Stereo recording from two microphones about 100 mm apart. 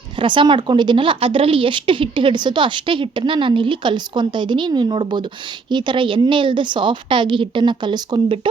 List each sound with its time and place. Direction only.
0.2 s a woman's voice: 55° right (ahead or behind)